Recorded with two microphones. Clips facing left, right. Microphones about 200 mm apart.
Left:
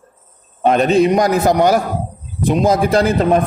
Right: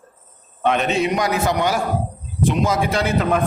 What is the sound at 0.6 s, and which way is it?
A man's voice, 35° left (ahead or behind).